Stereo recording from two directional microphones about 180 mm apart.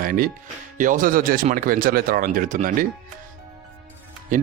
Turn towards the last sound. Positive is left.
turn(degrees=-45)  # may be behind; listen again after turning